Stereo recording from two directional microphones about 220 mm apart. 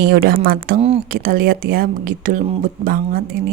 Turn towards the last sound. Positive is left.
turn(degrees=-40)  # may be behind; listen again after turning